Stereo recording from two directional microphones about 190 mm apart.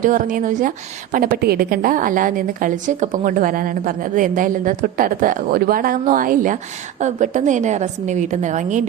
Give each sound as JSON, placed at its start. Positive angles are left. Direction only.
{"t": 0.0, "sound": "a woman's voice", "side_deg": -45}